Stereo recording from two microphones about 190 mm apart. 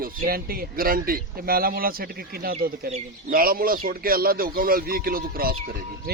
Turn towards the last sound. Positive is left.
turn(degrees=-50)  # may be behind; listen again after turning